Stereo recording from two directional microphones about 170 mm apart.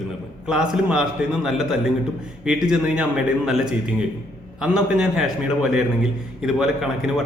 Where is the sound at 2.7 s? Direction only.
5° right (ahead or behind).